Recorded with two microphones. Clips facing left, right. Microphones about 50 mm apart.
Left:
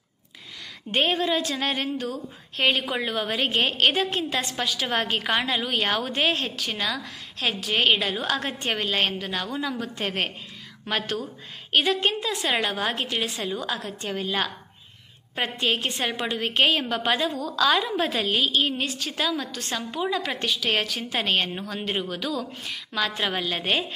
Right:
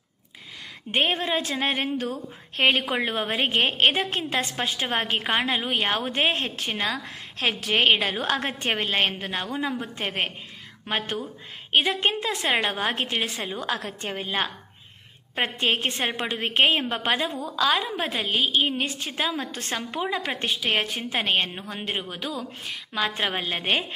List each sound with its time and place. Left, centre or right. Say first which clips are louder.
0.9 s a woman's voice: left 1 dB; right
9.9 s a woman's voice: even; centre; by 14.1 s right
14.1 s a woman's voice: left 1 dB; right
17.5 s a woman's voice: left 1 dB; centre; by 20.2 s right
20.2 s a woman's voice: left 1 dB; right